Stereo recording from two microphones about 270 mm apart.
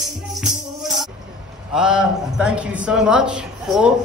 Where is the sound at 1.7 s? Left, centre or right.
Centre.